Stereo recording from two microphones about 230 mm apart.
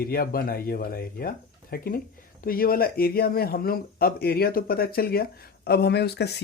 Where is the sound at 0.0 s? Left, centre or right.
Left.